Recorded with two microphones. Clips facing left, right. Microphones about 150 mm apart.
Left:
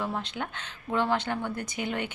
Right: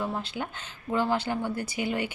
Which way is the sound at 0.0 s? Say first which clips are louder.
Right 1 dB; 5° right (ahead or behind).